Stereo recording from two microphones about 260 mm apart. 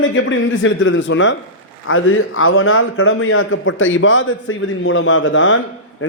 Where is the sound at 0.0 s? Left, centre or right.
Left.